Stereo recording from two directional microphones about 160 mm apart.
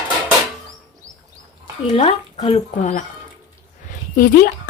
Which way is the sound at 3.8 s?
60° left (ahead or behind).